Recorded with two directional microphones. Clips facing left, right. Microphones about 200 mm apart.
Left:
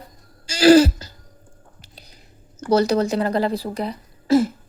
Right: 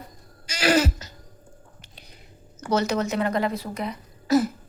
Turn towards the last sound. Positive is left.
turn(degrees=30)  # may be behind; listen again after turning